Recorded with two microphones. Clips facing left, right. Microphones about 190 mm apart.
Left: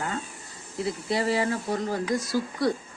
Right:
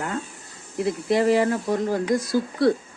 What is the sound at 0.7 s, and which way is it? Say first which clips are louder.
Speech: right 6 dB; 50° right (ahead or behind).